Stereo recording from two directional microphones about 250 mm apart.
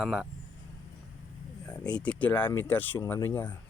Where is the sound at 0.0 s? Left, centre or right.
Centre.